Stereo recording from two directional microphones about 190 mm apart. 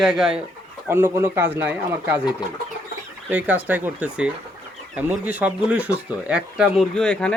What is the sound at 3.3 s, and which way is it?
Speech, 10° right (ahead or behind).